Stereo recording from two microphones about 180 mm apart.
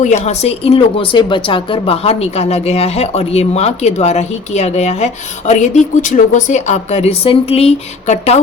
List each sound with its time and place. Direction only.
0.0 s a woman's voice: 40° left (ahead or behind)